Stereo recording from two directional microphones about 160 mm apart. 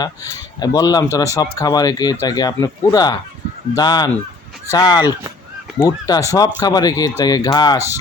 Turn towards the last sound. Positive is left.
turn(degrees=25)  # may be behind; listen again after turning